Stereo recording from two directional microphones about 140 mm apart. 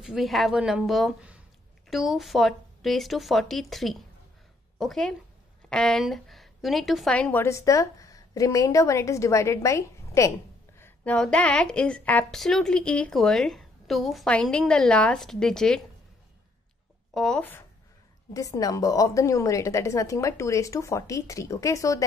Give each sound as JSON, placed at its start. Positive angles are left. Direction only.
{"t": 0.0, "sound": "a woman's voice", "side_deg": 0}
{"t": 10.8, "sound": "a woman's voice", "side_deg": 10}
{"t": 17.1, "sound": "speech", "side_deg": 5}
{"t": 18.3, "sound": "a woman's voice", "side_deg": 25}